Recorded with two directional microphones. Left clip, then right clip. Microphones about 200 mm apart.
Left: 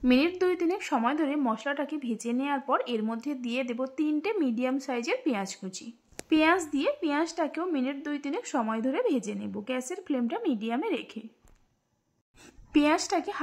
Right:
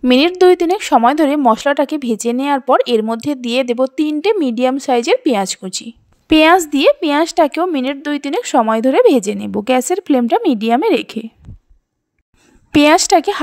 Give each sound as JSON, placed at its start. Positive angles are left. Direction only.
{"t": 0.0, "sound": "speech", "side_deg": -45}
{"t": 12.7, "sound": "speech", "side_deg": -45}